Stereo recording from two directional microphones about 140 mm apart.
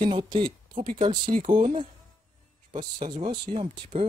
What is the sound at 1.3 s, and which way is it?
Speech, 55° right (ahead or behind).